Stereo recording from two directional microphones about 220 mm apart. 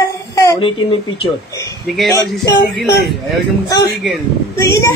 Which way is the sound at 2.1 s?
15° left (ahead or behind).